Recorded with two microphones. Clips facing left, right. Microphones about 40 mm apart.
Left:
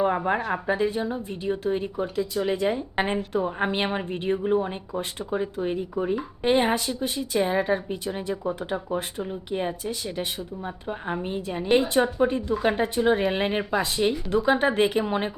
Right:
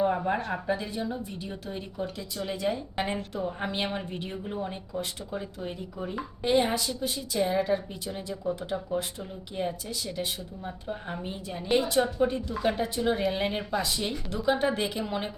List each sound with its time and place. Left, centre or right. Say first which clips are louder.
0.0 s a woman's voice: left 3 dB; left